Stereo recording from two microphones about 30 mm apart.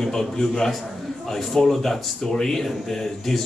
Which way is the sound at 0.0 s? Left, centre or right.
Centre.